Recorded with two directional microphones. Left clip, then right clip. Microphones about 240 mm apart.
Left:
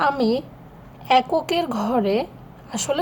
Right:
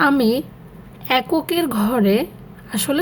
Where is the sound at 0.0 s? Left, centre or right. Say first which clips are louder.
Right 3 dB; right.